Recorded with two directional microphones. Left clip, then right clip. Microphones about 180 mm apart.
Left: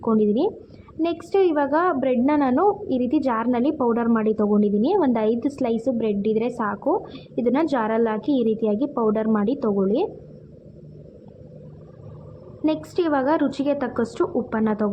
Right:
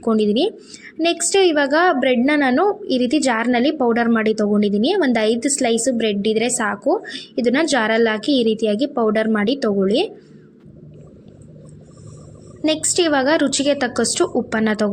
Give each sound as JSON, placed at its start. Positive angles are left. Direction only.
{"t": 0.0, "sound": "a woman's voice", "side_deg": -20}
{"t": 12.6, "sound": "a woman's voice", "side_deg": -15}